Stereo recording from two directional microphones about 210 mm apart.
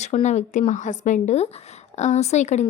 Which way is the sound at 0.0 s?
35° left (ahead or behind).